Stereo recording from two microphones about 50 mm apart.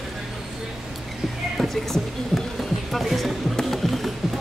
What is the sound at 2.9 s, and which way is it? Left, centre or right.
Music, centre.